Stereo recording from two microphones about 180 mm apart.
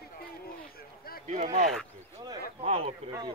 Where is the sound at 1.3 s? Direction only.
40° right (ahead or behind).